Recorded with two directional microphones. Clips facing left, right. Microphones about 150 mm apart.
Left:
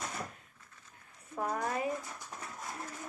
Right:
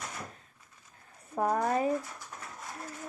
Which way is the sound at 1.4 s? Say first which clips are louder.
Right 6 dB; 45° right (ahead or behind).